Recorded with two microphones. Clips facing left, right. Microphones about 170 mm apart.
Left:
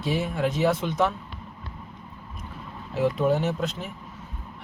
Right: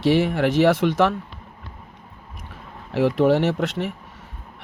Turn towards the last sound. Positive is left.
turn(degrees=-75)  # may be behind; listen again after turning